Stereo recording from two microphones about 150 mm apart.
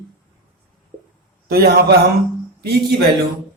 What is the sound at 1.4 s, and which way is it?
Speech, 90° right.